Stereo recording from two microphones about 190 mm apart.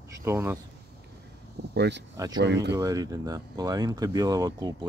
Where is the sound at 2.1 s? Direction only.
20° right (ahead or behind).